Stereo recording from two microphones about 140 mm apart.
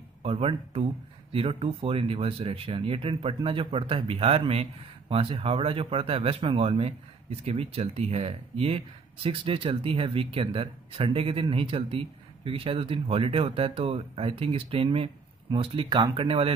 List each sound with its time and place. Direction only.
0.2 s speech: 45° right (ahead or behind)